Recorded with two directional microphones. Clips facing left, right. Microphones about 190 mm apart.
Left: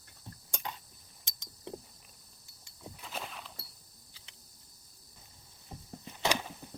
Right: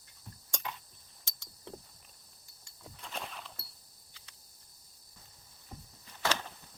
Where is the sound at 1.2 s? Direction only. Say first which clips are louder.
Left 4 dB; 20° left (ahead or behind).